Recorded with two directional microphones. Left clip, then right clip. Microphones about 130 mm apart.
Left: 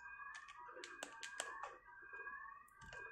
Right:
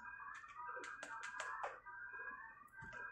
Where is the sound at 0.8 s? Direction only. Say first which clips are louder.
Right 3 dB; 35° left (ahead or behind).